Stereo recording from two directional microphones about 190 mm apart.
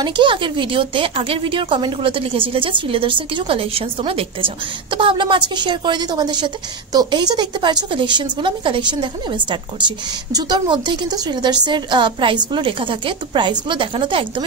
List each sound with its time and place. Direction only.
0.0 s a woman's voice: 25° right (ahead or behind)